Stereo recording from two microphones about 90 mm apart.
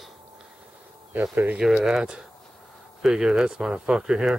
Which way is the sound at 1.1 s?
20° right (ahead or behind).